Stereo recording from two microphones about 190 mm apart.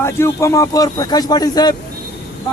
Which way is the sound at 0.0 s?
15° left (ahead or behind).